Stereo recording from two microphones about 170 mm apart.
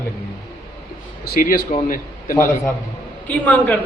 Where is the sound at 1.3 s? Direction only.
60° left (ahead or behind).